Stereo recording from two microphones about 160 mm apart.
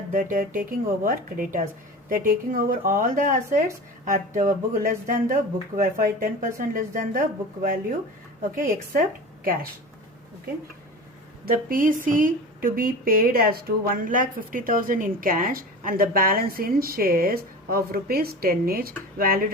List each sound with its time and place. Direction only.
0.1 s a woman's voice: 55° right (ahead or behind)
11.4 s a woman's voice: 60° right (ahead or behind)